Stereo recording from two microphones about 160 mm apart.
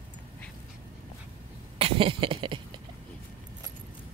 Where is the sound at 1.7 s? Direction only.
35° right (ahead or behind).